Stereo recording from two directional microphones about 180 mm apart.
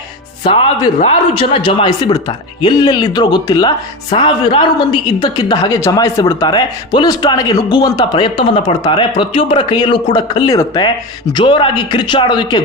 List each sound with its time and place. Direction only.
0.4 s speech: 30° left (ahead or behind)